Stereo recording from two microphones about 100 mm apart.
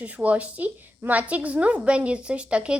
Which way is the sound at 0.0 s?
15° right (ahead or behind).